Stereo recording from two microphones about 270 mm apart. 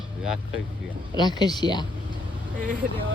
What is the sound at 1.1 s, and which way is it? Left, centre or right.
Speech, centre.